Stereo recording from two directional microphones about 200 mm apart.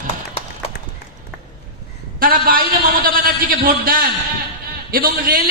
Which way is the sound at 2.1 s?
45° right (ahead or behind).